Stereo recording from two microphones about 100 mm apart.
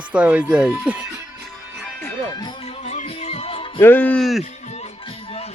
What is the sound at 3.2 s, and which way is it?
Music, 85° left.